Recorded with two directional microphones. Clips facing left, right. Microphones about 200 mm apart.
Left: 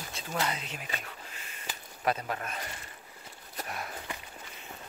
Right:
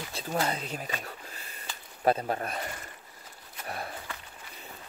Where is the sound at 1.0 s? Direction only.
35° right (ahead or behind).